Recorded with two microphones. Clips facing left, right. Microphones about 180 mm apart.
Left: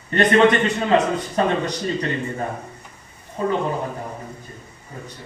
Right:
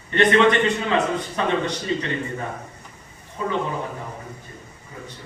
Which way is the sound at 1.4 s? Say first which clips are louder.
Left 3 dB; 40° left (ahead or behind).